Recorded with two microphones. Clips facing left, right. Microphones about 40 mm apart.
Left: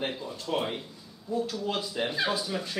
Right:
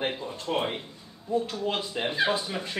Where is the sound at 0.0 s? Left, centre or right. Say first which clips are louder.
Right 2 dB; right.